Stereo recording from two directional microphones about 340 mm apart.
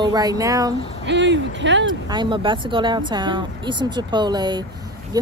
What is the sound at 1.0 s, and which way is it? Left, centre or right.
Speech, right.